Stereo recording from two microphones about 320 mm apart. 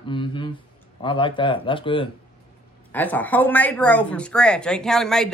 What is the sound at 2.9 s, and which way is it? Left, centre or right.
Speech, centre.